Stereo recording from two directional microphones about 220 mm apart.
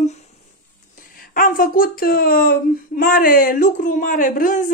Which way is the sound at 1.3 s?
40° left (ahead or behind).